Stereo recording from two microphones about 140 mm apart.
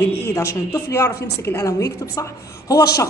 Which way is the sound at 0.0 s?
15° left (ahead or behind).